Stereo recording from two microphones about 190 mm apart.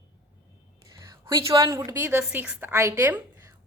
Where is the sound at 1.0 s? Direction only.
15° right (ahead or behind).